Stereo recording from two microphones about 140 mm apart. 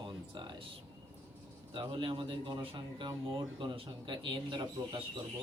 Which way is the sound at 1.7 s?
35° right (ahead or behind).